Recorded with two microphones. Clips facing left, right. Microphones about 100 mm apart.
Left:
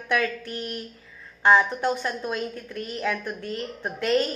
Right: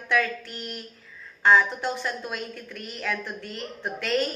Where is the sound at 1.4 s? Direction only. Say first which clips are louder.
Left 1 dB; 20° left (ahead or behind).